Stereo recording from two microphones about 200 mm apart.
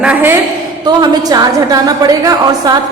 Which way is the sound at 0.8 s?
20° right (ahead or behind).